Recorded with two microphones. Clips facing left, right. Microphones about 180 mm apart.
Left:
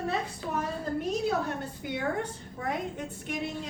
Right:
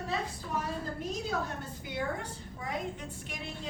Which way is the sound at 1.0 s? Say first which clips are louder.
Left 8 dB; 65° left (ahead or behind).